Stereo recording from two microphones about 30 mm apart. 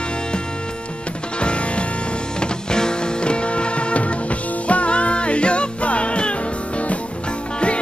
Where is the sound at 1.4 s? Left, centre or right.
Left.